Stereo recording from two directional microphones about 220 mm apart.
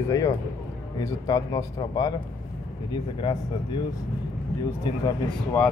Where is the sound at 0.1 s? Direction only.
15° left (ahead or behind).